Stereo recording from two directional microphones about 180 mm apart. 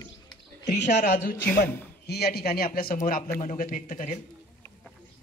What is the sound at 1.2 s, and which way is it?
A man's voice, 65° left (ahead or behind).